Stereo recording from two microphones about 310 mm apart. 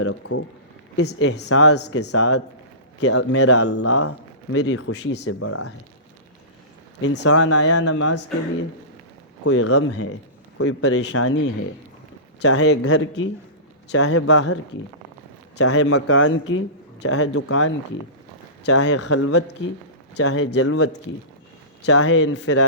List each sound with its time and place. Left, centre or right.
0.0 s a man's voice: left
7.0 s speech: left
7.3 s a man's voice: left
9.4 s a man's voice: left